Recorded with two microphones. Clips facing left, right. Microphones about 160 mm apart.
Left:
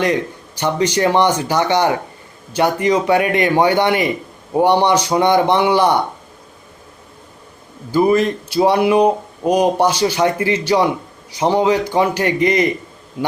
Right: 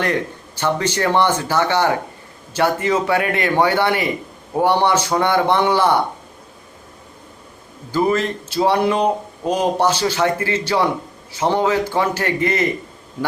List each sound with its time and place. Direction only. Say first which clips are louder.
0.0 s speech: left 3 dB; 15° left (ahead or behind)
7.9 s speech: left 4 dB; 15° left (ahead or behind)